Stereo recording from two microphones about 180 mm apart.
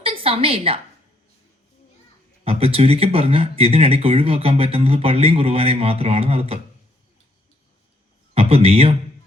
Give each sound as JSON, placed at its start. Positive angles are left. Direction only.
{"t": 0.0, "sound": "a sound", "side_deg": -30}
{"t": 2.4, "sound": "speech", "side_deg": -30}
{"t": 8.4, "sound": "speech", "side_deg": -35}